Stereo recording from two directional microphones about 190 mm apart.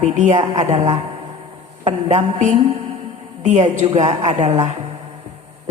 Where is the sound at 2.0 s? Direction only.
35° right (ahead or behind).